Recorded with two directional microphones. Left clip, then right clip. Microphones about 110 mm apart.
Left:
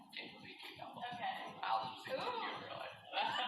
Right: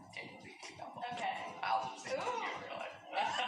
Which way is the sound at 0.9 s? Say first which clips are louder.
Right 4 dB; 30° right (ahead or behind).